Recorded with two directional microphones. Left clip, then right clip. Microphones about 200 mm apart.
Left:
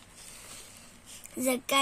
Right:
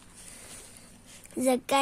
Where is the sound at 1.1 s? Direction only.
50° right (ahead or behind).